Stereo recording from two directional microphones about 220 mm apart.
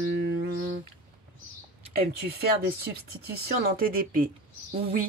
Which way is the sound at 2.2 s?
45° right (ahead or behind).